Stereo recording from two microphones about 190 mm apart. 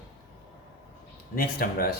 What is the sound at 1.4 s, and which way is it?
Speech, 50° left (ahead or behind).